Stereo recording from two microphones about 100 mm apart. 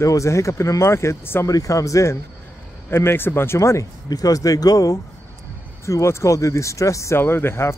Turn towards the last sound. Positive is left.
turn(degrees=25)  # may be behind; listen again after turning